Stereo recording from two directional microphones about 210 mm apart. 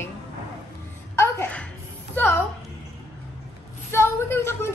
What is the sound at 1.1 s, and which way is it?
Music, 10° left (ahead or behind).